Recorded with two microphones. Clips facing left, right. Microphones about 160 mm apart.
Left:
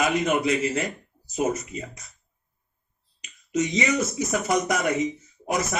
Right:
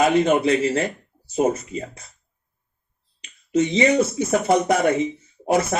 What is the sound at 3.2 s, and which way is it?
Speech, 30° right (ahead or behind).